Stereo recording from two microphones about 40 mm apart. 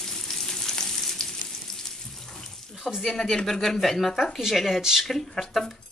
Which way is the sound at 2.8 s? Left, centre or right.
Centre.